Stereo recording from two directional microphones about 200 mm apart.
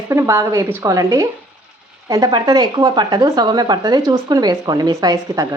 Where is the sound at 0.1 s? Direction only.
15° right (ahead or behind).